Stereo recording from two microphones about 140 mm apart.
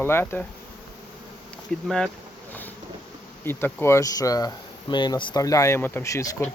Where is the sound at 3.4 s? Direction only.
15° left (ahead or behind).